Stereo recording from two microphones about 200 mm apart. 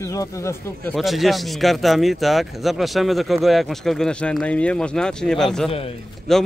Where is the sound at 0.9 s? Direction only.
Centre (ahead or behind).